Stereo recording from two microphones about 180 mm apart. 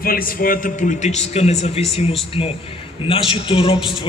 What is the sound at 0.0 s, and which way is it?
A man's voice, 55° left (ahead or behind).